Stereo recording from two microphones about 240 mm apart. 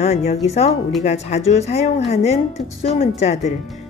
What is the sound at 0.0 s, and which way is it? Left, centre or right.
Speech, left.